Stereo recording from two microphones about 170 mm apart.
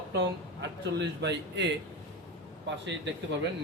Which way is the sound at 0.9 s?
90° right.